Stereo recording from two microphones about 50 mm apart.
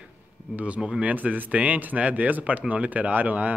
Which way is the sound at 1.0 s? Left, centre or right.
Right.